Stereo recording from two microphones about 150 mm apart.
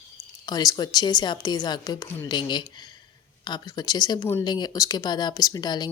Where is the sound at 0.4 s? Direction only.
25° left (ahead or behind).